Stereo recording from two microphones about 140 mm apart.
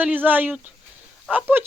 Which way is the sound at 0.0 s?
10° right (ahead or behind).